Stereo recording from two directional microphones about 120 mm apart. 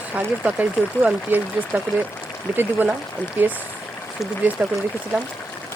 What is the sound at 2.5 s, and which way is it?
Speech, 15° right (ahead or behind).